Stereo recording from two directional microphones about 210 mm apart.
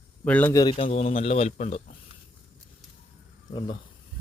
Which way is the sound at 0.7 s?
30° left (ahead or behind).